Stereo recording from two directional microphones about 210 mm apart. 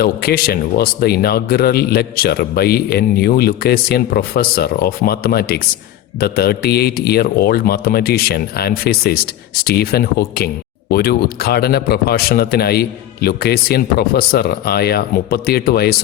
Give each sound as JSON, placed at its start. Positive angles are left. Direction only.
{"t": 0.0, "sound": "a man's voice", "side_deg": 45}